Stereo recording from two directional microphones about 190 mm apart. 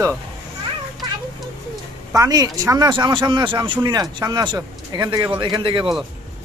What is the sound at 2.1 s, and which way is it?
Speech, 20° right (ahead or behind).